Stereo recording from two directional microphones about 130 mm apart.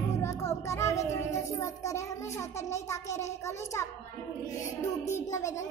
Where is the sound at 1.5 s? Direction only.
25° left (ahead or behind).